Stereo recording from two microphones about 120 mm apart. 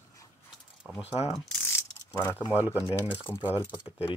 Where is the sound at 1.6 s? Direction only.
20° left (ahead or behind).